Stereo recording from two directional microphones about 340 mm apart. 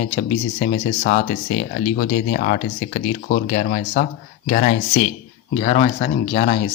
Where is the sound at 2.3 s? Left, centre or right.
Left.